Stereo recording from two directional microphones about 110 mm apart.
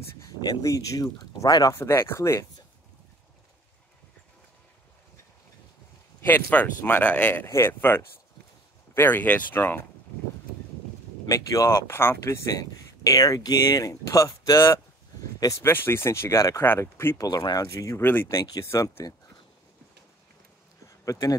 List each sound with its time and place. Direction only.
0.2 s speech: 35° left (ahead or behind)
1.8 s speech: 20° left (ahead or behind)
6.2 s speech: 15° left (ahead or behind)
7.4 s speech: 25° left (ahead or behind)
11.2 s speech: 30° left (ahead or behind)
12.5 s speech: 35° left (ahead or behind)
15.6 s speech: 20° left (ahead or behind)
17.3 s speech: 35° left (ahead or behind)
18.0 s speech: 20° left (ahead or behind)
18.3 s speech: 30° left (ahead or behind)
21.0 s speech: 30° left (ahead or behind)